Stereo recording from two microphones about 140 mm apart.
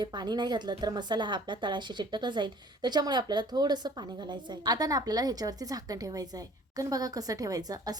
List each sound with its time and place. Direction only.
0.0 s a woman's voice: 30° right (ahead or behind)